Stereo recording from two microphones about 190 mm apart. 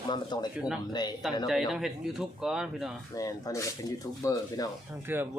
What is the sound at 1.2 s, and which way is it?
Speech, centre (ahead or behind).